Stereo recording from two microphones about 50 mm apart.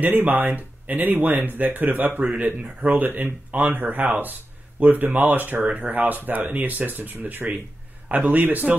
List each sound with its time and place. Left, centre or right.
0.0 s speech: right